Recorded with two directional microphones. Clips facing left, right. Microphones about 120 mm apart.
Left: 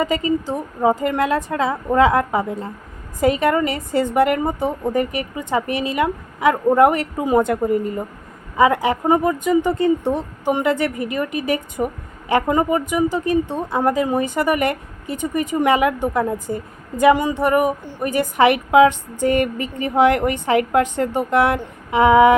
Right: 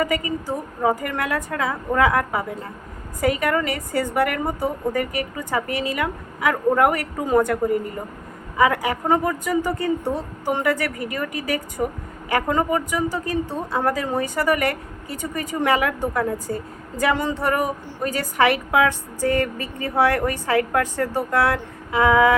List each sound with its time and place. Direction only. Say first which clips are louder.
0.0 s a woman's voice: left 4 dB; 25° left (ahead or behind)